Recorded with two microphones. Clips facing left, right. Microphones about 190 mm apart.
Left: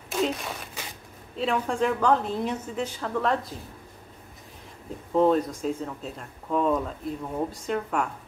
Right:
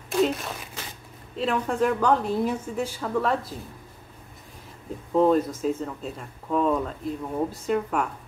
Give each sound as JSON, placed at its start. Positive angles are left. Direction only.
{"t": 0.1, "sound": "a sound", "side_deg": 0}
{"t": 1.3, "sound": "speech", "side_deg": 0}
{"t": 5.1, "sound": "speech", "side_deg": 0}